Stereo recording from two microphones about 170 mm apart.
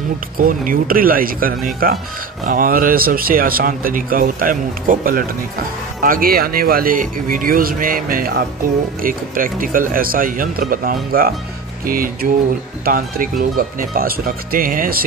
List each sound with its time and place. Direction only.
0.4 s speech: 55° right (ahead or behind)